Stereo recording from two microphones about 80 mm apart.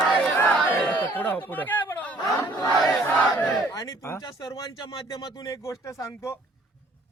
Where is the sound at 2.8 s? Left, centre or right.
Centre.